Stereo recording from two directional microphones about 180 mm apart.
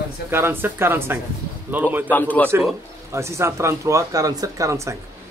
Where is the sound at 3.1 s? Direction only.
15° right (ahead or behind).